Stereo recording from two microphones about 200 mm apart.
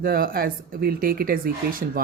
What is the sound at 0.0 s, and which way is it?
Speech, 45° right (ahead or behind).